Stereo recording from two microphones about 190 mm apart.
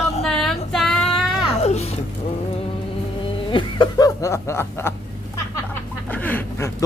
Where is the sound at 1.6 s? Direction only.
35° left (ahead or behind).